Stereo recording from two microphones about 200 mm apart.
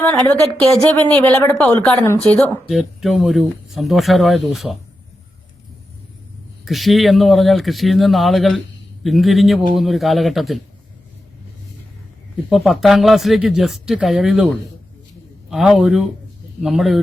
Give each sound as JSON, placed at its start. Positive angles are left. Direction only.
{"t": 0.0, "sound": "a woman's voice", "side_deg": 10}
{"t": 6.7, "sound": "speech", "side_deg": 0}
{"t": 12.5, "sound": "speech", "side_deg": 0}